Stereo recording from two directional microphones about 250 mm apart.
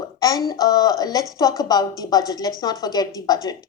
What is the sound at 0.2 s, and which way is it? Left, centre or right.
A woman's voice, centre.